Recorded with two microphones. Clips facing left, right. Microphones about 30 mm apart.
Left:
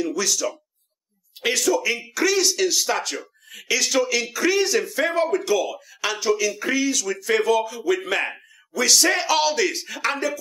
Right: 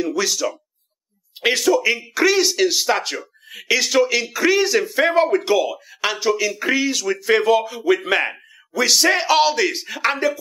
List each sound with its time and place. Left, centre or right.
0.0 s speech: right
4.7 s speech: right